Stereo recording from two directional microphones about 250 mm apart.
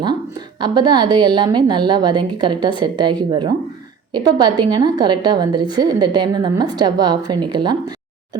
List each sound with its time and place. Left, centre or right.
0.0 s a woman's voice: centre